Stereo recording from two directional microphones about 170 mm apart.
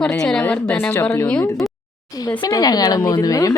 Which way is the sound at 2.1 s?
20° left (ahead or behind).